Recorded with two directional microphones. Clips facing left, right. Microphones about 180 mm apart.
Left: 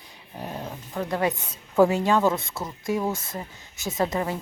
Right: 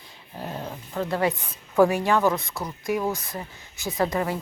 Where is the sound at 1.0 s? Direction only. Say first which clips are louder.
Right 1 dB; 15° left (ahead or behind).